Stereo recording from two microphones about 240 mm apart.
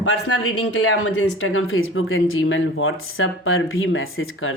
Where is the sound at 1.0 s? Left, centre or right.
Left.